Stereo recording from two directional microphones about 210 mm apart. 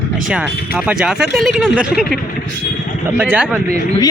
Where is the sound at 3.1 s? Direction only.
10° right (ahead or behind).